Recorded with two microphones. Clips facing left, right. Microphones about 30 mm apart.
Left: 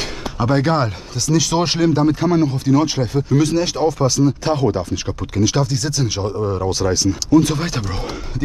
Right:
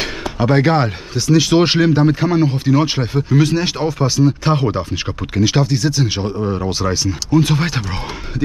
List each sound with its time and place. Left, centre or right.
0.4 s speech: centre